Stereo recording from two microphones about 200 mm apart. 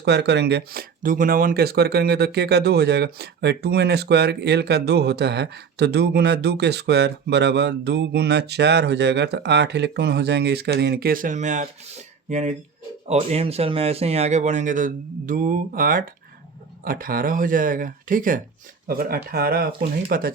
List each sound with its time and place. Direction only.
0.0 s speech: 55° right (ahead or behind)